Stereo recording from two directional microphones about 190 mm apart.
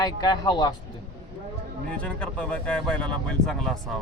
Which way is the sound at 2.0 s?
5° left (ahead or behind).